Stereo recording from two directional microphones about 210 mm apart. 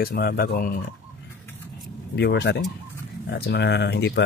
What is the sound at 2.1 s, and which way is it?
Speech, 55° left (ahead or behind).